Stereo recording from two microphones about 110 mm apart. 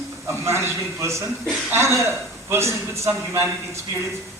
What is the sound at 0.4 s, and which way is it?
A man's voice, 25° right (ahead or behind).